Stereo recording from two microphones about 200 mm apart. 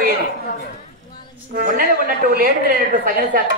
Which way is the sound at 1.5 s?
45° right (ahead or behind).